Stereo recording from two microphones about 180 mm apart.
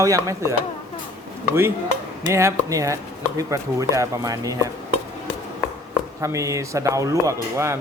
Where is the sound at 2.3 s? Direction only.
15° right (ahead or behind).